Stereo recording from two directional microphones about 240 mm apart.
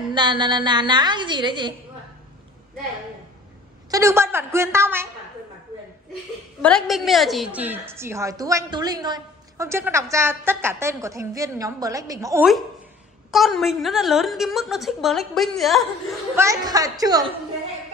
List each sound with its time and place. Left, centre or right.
0.1 s a woman's voice: centre
3.9 s a woman's voice: centre
6.6 s a woman's voice: centre
13.3 s a woman's voice: centre
16.3 s a woman's voice: centre